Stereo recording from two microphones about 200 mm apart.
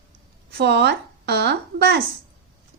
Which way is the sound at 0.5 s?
55° right (ahead or behind).